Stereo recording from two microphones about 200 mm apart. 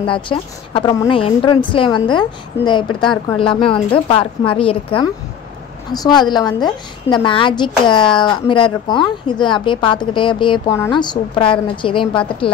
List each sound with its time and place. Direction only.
0.0 s a woman's voice: 25° left (ahead or behind)